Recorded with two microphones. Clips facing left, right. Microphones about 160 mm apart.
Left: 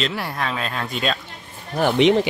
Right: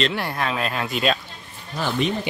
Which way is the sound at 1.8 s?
65° left (ahead or behind).